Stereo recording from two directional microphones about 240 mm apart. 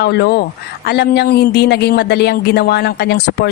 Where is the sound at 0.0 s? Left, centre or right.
Left.